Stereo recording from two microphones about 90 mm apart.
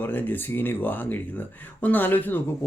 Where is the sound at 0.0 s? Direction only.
20° left (ahead or behind).